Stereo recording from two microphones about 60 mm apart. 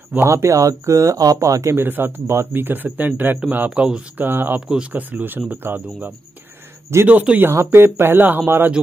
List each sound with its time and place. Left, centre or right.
0.2 s speech: right
1.8 s speech: right
3.7 s speech: centre
4.2 s speech: right
4.6 s speech: centre
4.9 s speech: right